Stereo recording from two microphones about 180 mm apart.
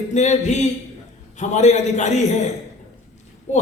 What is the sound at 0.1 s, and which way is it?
A man's voice, 40° left (ahead or behind).